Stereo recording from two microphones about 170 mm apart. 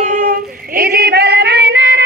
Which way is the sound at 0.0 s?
50° right (ahead or behind).